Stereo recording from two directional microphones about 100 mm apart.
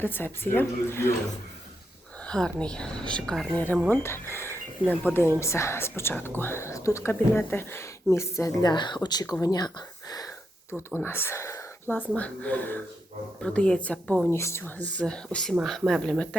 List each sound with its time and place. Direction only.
0.0 s speech: 20° left (ahead or behind)
2.2 s a woman's voice: 10° left (ahead or behind)
3.8 s speech: 20° left (ahead or behind)
8.6 s speech: 50° left (ahead or behind)
9.0 s speech: 40° left (ahead or behind)
11.0 s speech: 25° left (ahead or behind)
11.9 s a woman's voice: 15° left (ahead or behind)
14.3 s a woman's voice: 25° left (ahead or behind); by 16.4 s 10° left (ahead or behind)